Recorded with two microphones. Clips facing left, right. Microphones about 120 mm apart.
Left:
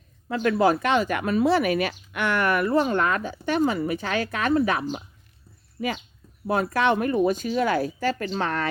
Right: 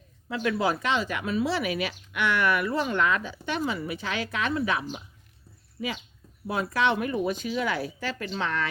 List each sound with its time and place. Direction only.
0.3 s speech: 50° left (ahead or behind)
6.5 s speech: 50° left (ahead or behind)